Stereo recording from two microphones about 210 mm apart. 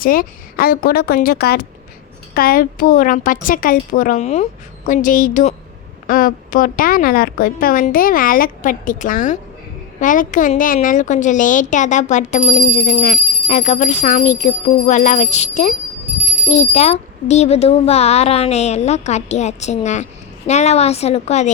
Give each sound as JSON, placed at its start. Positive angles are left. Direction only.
{"t": 0.0, "sound": "a woman's voice", "side_deg": 45}